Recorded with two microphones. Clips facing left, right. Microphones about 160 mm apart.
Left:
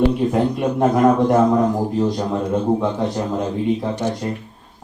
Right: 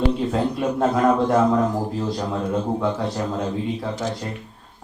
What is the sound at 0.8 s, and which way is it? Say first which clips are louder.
A man's voice: left 4 dB; 15° left (ahead or behind).